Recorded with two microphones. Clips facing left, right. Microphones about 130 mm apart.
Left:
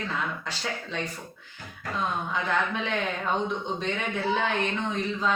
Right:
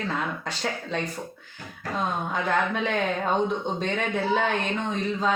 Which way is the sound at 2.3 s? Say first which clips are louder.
Right 4 dB; 45° right (ahead or behind).